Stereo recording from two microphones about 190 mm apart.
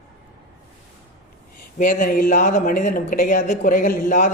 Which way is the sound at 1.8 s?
45° left (ahead or behind).